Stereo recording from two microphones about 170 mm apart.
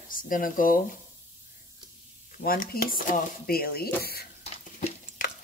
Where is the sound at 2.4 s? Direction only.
60° left (ahead or behind).